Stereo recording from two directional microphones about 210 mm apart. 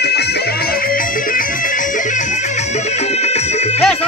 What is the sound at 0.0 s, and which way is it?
Music, 50° left (ahead or behind).